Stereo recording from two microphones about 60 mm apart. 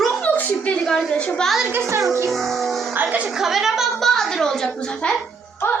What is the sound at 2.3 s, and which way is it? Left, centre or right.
Music, centre.